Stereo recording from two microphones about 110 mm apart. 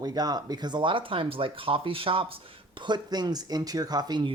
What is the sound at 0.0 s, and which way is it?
Speech, 35° right (ahead or behind).